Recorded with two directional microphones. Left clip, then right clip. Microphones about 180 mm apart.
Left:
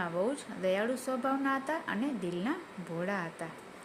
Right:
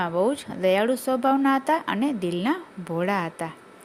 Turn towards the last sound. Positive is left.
turn(degrees=-50)  # may be behind; listen again after turning